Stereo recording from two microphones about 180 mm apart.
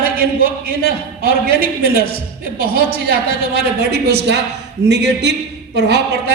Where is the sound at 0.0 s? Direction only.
55° right (ahead or behind).